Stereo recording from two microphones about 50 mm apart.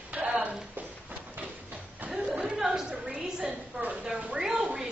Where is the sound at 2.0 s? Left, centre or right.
Right.